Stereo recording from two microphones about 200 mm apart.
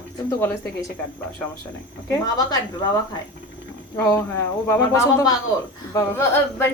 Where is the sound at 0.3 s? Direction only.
15° left (ahead or behind).